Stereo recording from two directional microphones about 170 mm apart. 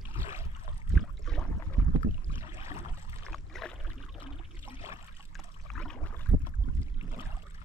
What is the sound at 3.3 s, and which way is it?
Boat, 5° left (ahead or behind).